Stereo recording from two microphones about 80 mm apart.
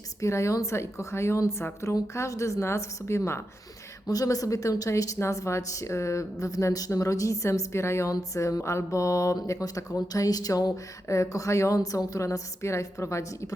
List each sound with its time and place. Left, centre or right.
0.2 s a woman's voice: left
4.0 s speech: left